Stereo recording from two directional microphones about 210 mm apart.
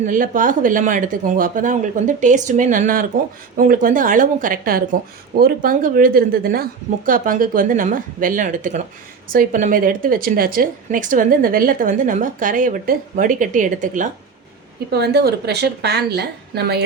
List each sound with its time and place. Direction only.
0.1 s speech: 40° right (ahead or behind)
14.9 s a woman's voice: 50° right (ahead or behind)